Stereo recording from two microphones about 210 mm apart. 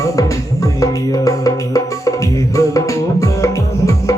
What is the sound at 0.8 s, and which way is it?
Music, 15° left (ahead or behind).